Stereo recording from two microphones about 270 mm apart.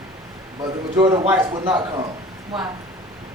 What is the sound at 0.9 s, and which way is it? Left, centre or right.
Speech, centre.